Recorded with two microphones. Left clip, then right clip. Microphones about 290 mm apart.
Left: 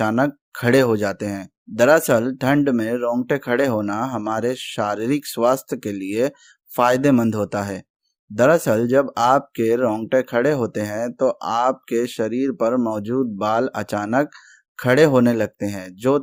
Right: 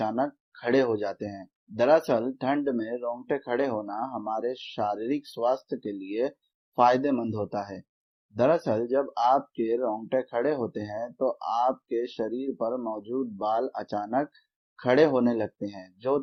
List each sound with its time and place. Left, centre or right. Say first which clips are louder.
0.0 s speech: left 8 dB; left